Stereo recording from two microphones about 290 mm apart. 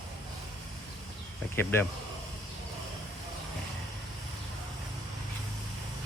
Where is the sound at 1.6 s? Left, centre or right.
Centre.